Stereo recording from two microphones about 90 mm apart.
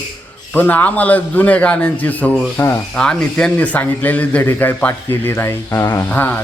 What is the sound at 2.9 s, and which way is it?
A man's voice, 10° left (ahead or behind).